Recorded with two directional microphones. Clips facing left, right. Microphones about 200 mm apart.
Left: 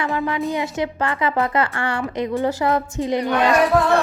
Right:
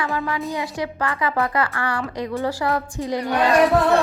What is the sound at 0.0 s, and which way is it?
A woman's voice, 20° left (ahead or behind).